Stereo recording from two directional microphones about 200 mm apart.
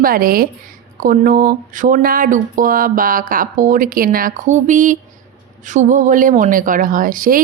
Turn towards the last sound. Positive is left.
turn(degrees=-45)  # may be behind; listen again after turning